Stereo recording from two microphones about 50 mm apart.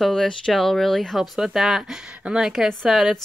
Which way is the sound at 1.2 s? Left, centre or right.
Centre.